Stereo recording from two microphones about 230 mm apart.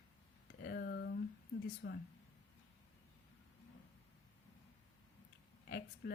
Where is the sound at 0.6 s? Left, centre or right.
Left.